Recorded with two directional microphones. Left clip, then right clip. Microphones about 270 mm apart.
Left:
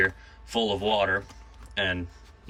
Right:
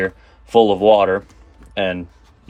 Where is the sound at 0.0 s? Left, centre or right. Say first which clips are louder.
Right 3 dB; centre.